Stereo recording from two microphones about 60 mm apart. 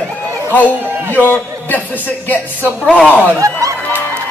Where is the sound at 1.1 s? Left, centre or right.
Left.